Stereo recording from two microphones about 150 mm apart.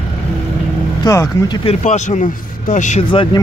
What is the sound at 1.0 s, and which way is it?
Speech, 25° left (ahead or behind).